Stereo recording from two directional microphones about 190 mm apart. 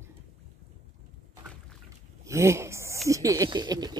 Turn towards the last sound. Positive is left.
turn(degrees=-20)  # may be behind; listen again after turning